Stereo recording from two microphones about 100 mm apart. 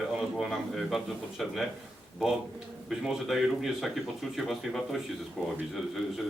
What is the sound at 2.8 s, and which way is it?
Speech, 5° right (ahead or behind).